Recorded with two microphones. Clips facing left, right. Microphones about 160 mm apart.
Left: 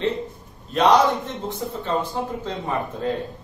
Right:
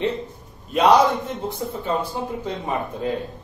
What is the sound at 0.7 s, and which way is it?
A man's voice, 10° right (ahead or behind).